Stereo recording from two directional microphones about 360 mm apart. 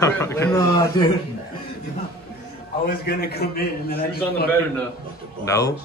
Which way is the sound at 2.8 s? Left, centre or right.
Left.